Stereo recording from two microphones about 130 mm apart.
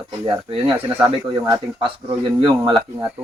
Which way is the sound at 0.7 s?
15° right (ahead or behind).